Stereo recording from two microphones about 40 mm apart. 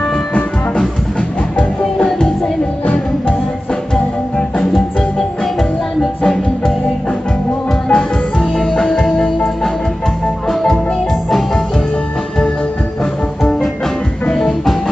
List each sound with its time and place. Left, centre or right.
2.1 s music: centre
3.9 s music: centre
7.9 s music: centre
14.3 s music: centre